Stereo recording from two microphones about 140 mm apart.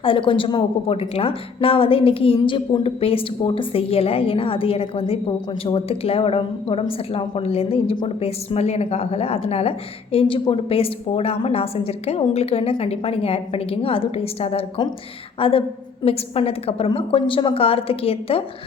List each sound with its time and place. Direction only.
0.0 s a woman's voice: 40° left (ahead or behind)